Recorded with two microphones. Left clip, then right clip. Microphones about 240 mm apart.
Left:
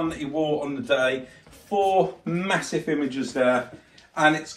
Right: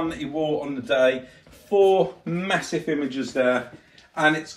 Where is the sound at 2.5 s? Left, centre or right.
Left.